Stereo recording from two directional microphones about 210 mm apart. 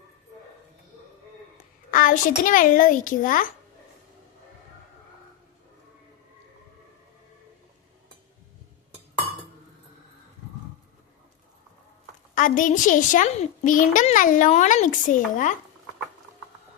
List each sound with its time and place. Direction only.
1.9 s a child's voice: 40° left (ahead or behind)
12.3 s a child's voice: 40° left (ahead or behind)